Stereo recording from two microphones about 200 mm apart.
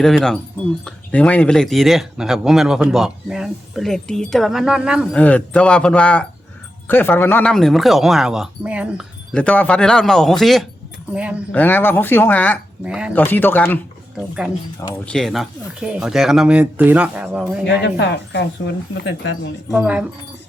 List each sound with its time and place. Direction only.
0.0 s speech: centre (ahead or behind)
5.1 s speech: 5° left (ahead or behind)
9.3 s speech: 5° left (ahead or behind)
11.5 s speech: 10° left (ahead or behind)
12.8 s speech: 5° right (ahead or behind)
13.1 s speech: 10° left (ahead or behind)
15.0 s speech: 5° left (ahead or behind)
17.7 s speech: 65° left (ahead or behind)
19.7 s speech: 5° right (ahead or behind)